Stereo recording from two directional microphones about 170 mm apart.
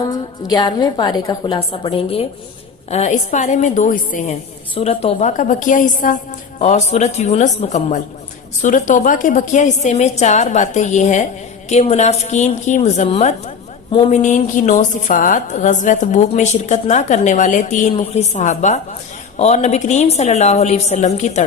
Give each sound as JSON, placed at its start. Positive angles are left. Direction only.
{"t": 0.0, "sound": "a woman's voice", "side_deg": 25}
{"t": 4.7, "sound": "a woman's voice", "side_deg": 35}
{"t": 5.4, "sound": "a woman's voice", "side_deg": 50}
{"t": 6.6, "sound": "a woman's voice", "side_deg": 40}